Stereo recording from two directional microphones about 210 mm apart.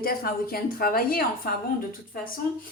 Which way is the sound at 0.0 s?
45° left (ahead or behind).